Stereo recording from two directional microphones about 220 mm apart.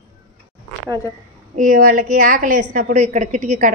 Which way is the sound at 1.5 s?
40° right (ahead or behind).